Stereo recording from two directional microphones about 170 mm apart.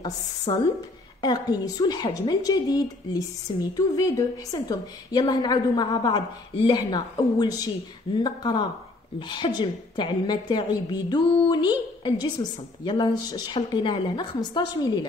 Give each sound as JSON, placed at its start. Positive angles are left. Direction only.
{"t": 0.5, "sound": "a woman's voice", "side_deg": 25}